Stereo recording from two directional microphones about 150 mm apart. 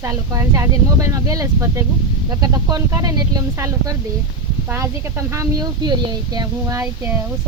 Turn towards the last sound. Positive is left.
turn(degrees=-20)  # may be behind; listen again after turning